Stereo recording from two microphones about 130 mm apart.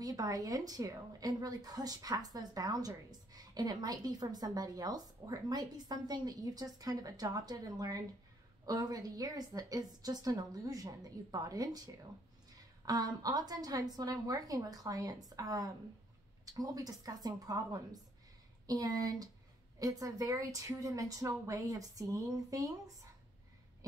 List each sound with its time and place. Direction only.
0.0 s a woman's voice: 25° right (ahead or behind)